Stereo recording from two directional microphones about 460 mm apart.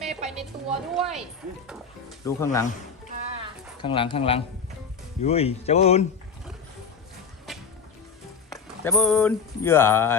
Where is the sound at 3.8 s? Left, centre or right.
Centre.